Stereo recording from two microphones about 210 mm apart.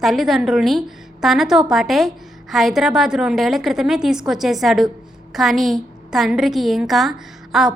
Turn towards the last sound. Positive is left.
turn(degrees=0)  # may be behind; listen again after turning